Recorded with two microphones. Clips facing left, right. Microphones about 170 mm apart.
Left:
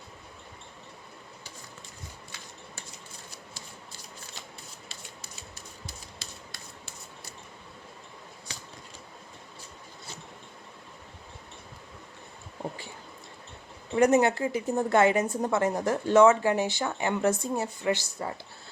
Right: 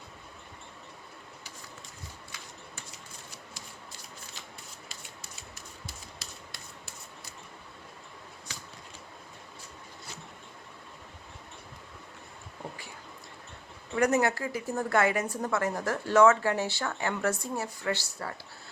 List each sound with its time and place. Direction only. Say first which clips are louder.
13.9 s a woman's voice: left 4 dB; 20° left (ahead or behind)